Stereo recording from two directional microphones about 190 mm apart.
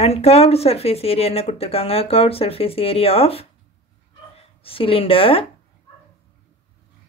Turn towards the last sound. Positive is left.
turn(degrees=30)  # may be behind; listen again after turning